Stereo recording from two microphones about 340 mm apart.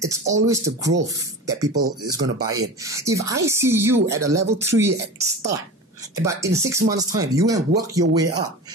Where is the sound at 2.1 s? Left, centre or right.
Right.